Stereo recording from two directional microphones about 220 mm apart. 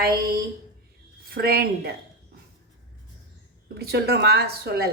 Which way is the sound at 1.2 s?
45° right (ahead or behind).